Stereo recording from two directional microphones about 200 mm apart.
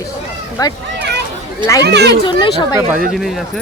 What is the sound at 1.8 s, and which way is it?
Speech, 55° right (ahead or behind).